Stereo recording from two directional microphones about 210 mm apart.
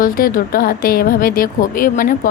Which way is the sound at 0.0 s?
40° left (ahead or behind).